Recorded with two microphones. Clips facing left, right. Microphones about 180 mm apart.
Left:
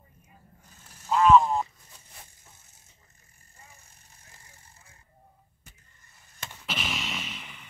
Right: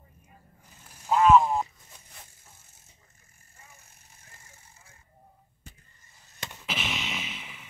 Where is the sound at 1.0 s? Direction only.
5° right (ahead or behind).